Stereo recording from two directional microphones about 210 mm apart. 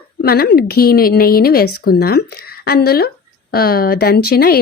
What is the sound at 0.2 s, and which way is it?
Speech, 45° left (ahead or behind).